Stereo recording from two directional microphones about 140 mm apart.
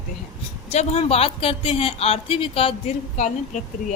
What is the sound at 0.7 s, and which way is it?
Speech, 50° left (ahead or behind).